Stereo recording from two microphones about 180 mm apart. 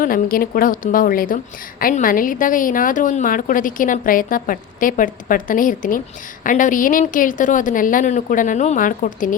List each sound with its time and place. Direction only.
0.0 s a woman's voice: 50° left (ahead or behind)